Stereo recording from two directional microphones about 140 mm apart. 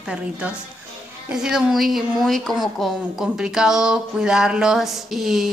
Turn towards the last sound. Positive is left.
turn(degrees=0)  # may be behind; listen again after turning